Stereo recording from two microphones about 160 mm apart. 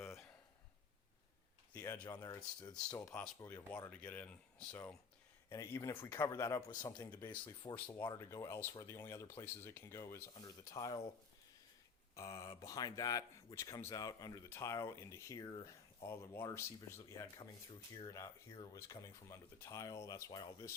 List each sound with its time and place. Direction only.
1.7 s speech: 15° left (ahead or behind)
7.6 s speech: 25° left (ahead or behind)
12.1 s speech: 20° left (ahead or behind)